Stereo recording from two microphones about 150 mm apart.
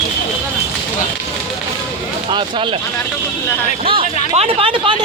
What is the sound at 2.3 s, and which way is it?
Speech, 35° right (ahead or behind).